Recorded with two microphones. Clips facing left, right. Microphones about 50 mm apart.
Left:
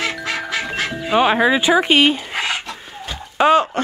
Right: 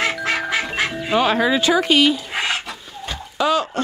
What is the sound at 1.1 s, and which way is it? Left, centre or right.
Speech, centre.